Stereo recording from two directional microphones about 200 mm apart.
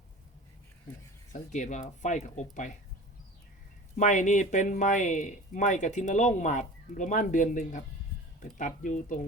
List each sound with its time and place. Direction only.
1.3 s speech: 35° left (ahead or behind)
3.9 s speech: 40° left (ahead or behind)